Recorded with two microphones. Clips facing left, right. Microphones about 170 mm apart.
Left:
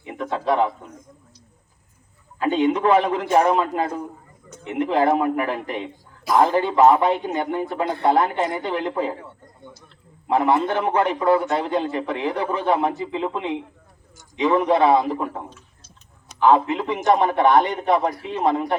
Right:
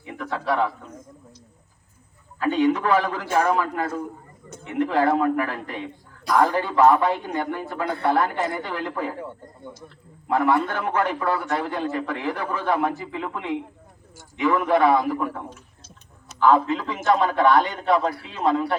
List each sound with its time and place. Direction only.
0.0 s a man's voice: 20° left (ahead or behind)
2.4 s a man's voice: 25° left (ahead or behind)
10.2 s a man's voice: 20° left (ahead or behind)